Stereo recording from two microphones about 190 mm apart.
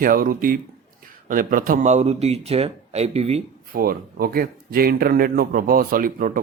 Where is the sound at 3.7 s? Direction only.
50° right (ahead or behind).